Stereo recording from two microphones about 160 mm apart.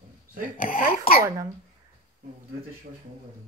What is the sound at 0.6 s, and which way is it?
Speech, 65° left (ahead or behind).